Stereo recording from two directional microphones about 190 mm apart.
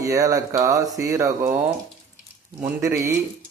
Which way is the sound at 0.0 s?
15° right (ahead or behind).